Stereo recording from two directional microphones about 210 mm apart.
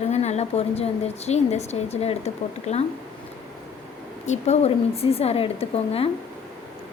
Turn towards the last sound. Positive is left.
turn(degrees=30)  # may be behind; listen again after turning